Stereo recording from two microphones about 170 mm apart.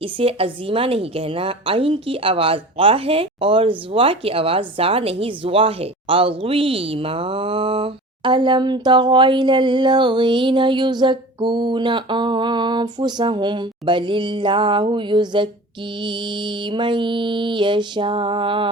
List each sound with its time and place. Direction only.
0.0 s a woman's voice: 35° right (ahead or behind)